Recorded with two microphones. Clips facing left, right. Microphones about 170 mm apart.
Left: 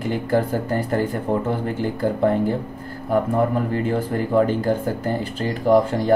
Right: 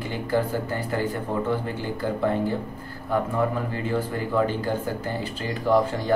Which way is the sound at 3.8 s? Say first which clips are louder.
Left 4 dB; 50° left (ahead or behind).